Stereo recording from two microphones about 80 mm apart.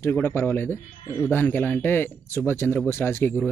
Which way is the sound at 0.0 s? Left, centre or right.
Left.